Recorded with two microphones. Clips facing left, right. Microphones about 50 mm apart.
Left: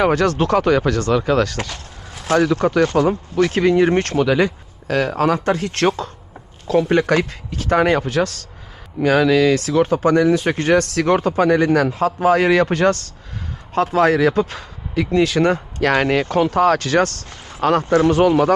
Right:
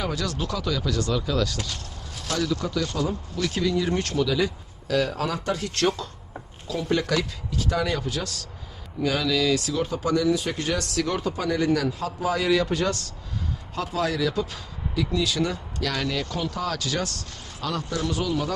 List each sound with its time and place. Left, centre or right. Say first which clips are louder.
0.0 s speech: left 12 dB; left